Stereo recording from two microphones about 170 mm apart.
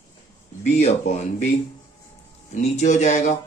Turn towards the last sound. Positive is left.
turn(degrees=45)  # may be behind; listen again after turning